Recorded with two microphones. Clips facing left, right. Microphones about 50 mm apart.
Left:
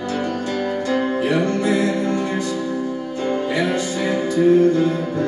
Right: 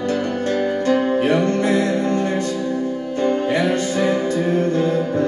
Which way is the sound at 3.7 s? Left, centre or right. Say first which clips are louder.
Right 2 dB; right.